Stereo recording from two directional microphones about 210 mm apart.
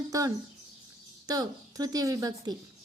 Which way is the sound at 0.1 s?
15° right (ahead or behind).